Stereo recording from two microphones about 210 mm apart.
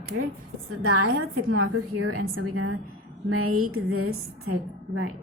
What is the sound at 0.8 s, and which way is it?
A woman's voice, 80° right.